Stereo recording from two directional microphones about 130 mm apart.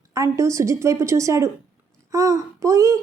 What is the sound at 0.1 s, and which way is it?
Speech, 25° right (ahead or behind).